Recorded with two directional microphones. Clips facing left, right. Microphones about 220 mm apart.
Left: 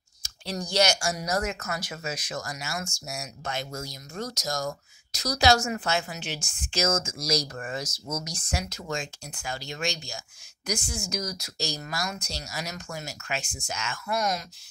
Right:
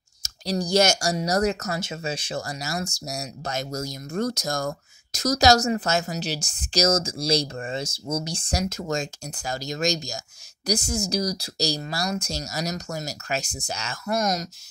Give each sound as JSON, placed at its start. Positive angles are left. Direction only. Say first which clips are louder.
{"t": 0.2, "sound": "speech", "louder": "right 7 dB", "side_deg": -40}
{"t": 8.6, "sound": "speech", "louder": "right 6 dB", "side_deg": -45}
{"t": 12.2, "sound": "speech", "louder": "right 7 dB", "side_deg": -45}